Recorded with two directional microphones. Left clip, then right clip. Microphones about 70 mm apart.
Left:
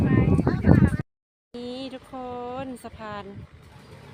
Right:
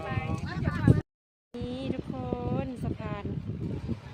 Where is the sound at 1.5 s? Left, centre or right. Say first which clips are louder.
Left 1 dB; centre.